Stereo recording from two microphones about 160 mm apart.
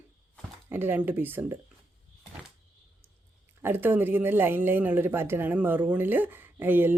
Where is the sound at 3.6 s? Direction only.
15° right (ahead or behind).